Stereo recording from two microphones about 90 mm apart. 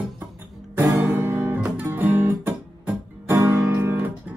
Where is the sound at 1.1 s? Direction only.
20° right (ahead or behind).